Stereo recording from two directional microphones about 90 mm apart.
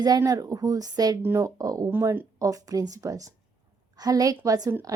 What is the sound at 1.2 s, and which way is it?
Speech, 25° right (ahead or behind).